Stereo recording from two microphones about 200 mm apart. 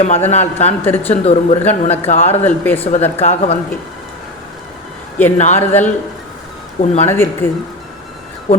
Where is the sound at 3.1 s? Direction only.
35° left (ahead or behind).